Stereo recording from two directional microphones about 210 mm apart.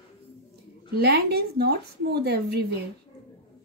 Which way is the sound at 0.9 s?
50° right (ahead or behind).